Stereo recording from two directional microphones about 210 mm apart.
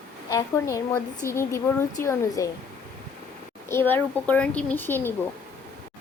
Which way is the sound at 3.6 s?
10° left (ahead or behind).